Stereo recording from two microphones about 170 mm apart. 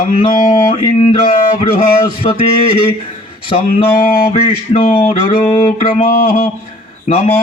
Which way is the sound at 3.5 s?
35° left (ahead or behind).